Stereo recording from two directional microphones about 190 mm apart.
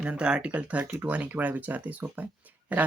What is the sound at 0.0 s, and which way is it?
Speech, 5° right (ahead or behind).